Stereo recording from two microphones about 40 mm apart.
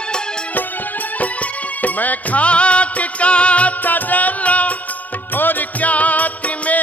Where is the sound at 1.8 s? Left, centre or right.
Left.